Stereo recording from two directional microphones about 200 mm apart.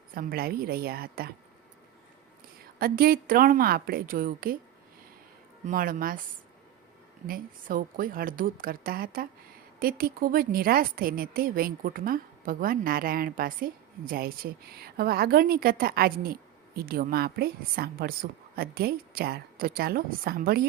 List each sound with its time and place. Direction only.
0.1 s a woman's voice: 45° right (ahead or behind)
2.7 s a woman's voice: 50° right (ahead or behind)
5.6 s a woman's voice: 45° right (ahead or behind)
7.3 s a woman's voice: 45° right (ahead or behind)